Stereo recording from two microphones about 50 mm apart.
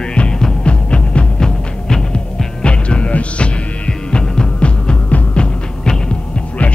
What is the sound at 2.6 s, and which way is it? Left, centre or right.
Music, left.